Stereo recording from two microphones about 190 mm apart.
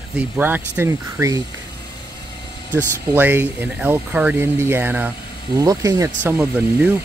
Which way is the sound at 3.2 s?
10° right (ahead or behind).